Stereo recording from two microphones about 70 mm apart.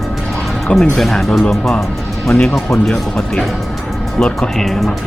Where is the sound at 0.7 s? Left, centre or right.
Centre.